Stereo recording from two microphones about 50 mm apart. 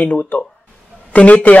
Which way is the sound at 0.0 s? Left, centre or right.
Left.